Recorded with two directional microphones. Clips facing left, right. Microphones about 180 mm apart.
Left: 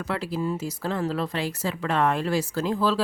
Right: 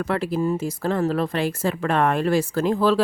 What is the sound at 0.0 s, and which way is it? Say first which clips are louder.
A woman's voice: right 5 dB; 55° right (ahead or behind).